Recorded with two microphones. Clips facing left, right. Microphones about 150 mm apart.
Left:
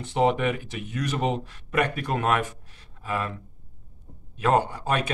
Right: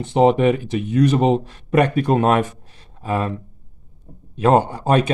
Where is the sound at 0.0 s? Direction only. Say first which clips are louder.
Right 8 dB; 25° right (ahead or behind).